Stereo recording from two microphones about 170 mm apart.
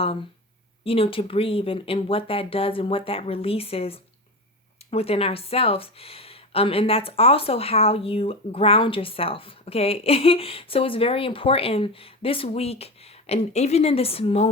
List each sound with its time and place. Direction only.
0.9 s speech: 35° left (ahead or behind)